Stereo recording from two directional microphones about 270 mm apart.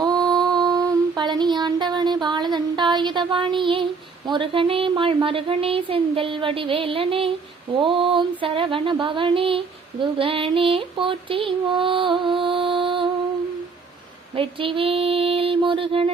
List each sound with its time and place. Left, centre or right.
0.0 s mantra: centre
4.3 s music: centre
14.3 s music: centre